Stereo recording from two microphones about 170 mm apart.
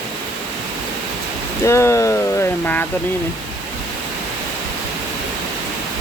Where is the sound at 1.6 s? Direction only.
15° left (ahead or behind).